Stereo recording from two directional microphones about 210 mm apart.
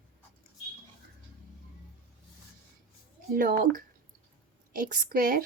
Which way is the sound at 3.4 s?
40° right (ahead or behind).